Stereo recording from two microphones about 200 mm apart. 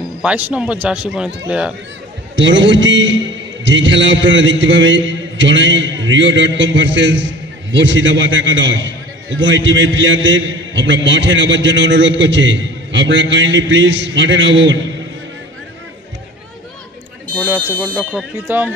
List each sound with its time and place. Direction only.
0.2 s speech: 5° right (ahead or behind)
2.3 s a man's voice: 65° right (ahead or behind)
17.9 s speech: 5° right (ahead or behind)